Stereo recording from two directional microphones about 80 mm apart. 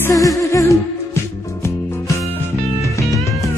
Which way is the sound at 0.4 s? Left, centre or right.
Left.